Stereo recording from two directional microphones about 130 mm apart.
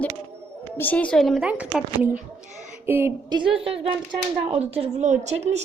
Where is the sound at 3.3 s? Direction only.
45° right (ahead or behind); by 5.6 s 60° right (ahead or behind).